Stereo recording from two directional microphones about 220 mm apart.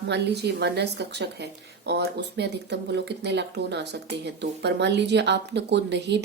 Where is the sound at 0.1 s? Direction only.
50° right (ahead or behind).